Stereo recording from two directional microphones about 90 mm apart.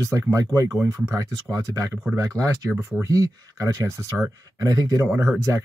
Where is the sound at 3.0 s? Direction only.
40° right (ahead or behind).